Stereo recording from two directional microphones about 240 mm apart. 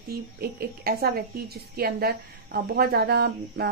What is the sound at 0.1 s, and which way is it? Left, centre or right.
A woman's voice, right.